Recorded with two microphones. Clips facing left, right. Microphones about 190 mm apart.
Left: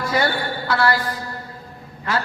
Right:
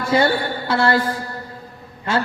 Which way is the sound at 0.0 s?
25° right (ahead or behind).